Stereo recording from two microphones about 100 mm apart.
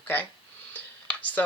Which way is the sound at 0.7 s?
15° left (ahead or behind).